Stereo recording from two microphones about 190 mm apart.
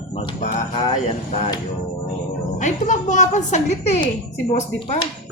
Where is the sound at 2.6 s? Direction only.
40° left (ahead or behind).